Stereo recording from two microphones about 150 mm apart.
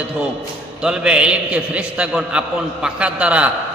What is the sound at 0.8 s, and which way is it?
A man's voice, 5° right (ahead or behind).